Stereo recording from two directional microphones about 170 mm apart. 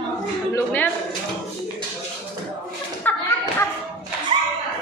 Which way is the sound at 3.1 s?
10° left (ahead or behind).